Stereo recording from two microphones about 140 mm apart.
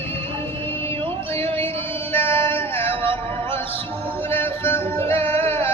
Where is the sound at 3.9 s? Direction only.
15° left (ahead or behind).